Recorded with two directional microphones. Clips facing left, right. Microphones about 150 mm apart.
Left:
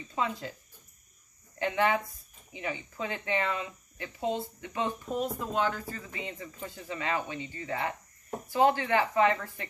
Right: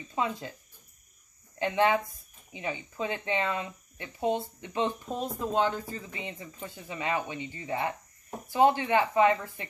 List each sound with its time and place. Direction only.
0.1 s speech: 20° right (ahead or behind)
1.6 s speech: 20° right (ahead or behind)